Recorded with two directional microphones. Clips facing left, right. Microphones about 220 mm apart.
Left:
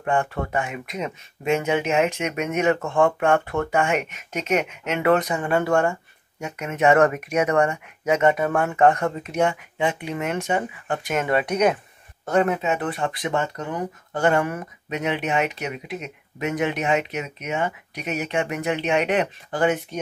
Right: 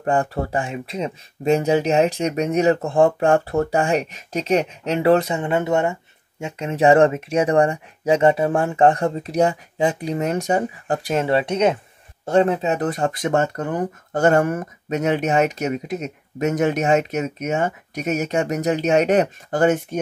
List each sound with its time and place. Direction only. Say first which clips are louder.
0.0 s speech: right 3 dB; 35° right (ahead or behind)